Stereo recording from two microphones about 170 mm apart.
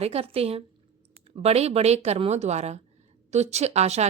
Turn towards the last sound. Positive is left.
turn(degrees=-40)  # may be behind; listen again after turning